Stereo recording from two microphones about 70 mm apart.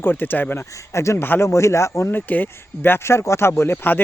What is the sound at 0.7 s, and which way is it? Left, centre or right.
Speech, left.